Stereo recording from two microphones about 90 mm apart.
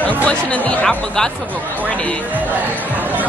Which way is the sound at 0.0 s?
15° left (ahead or behind).